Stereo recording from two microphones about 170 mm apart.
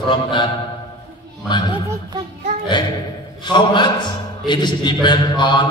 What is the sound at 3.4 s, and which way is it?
A man's voice, 25° left (ahead or behind).